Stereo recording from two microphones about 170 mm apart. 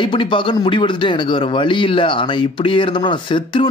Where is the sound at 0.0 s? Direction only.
30° left (ahead or behind).